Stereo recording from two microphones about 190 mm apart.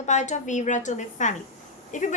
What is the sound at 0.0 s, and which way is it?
A woman's voice, 40° left (ahead or behind).